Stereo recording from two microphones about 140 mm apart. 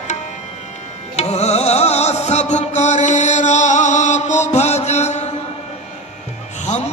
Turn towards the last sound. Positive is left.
turn(degrees=55)  # may be behind; listen again after turning